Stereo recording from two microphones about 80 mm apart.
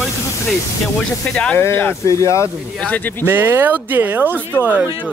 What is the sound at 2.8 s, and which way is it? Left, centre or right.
Speech, centre.